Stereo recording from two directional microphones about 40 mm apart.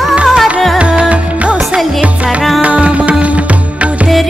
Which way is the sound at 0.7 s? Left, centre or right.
Right.